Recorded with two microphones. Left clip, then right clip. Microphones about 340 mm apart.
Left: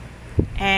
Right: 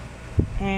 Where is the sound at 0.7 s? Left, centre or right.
Left.